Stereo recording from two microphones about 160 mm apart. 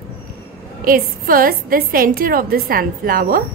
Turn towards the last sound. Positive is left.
turn(degrees=-65)  # may be behind; listen again after turning